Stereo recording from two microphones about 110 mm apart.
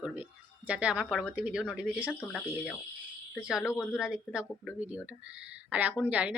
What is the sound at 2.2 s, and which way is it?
Speech, 10° left (ahead or behind).